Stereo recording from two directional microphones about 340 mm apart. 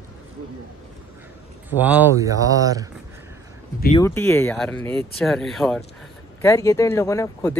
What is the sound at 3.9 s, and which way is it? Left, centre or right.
Speech, centre.